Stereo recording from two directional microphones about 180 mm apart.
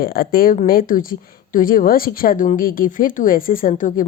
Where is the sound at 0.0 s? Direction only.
55° left (ahead or behind).